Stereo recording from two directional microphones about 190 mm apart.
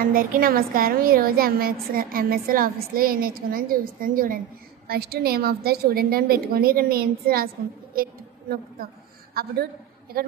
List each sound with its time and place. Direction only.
0.0 s a woman's voice: 50° right (ahead or behind)
7.9 s a sound: 50° right (ahead or behind)
9.3 s a woman's voice: 50° right (ahead or behind)